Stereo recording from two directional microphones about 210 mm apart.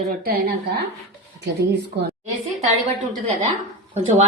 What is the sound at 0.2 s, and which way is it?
Speech, 50° right (ahead or behind).